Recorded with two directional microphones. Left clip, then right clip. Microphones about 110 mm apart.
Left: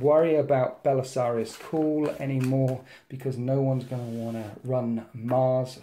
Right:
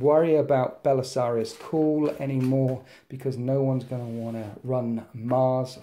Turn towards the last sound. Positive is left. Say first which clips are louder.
# right 1 dB
turn(degrees=-30)  # may be behind; listen again after turning